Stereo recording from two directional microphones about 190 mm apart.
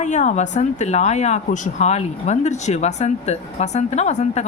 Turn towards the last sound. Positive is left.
turn(degrees=35)  # may be behind; listen again after turning